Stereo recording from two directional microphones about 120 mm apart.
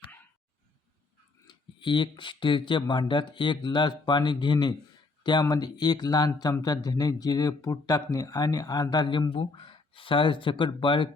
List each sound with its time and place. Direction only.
1.5 s speech: 40° left (ahead or behind)